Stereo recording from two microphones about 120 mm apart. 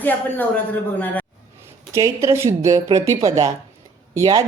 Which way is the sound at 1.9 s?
25° right (ahead or behind).